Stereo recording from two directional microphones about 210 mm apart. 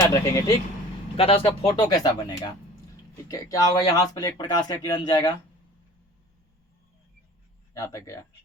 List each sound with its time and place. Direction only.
0.0 s speech: 15° left (ahead or behind)
1.1 s speech: 25° left (ahead or behind)
7.7 s speech: 15° left (ahead or behind)